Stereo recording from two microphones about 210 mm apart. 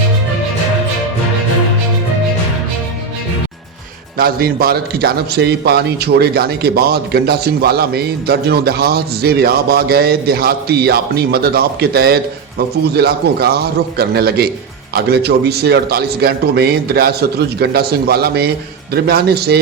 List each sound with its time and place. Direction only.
4.2 s a man's voice: 45° right (ahead or behind)